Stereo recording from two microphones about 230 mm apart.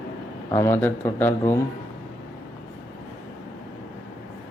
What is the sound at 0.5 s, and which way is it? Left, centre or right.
Speech, centre.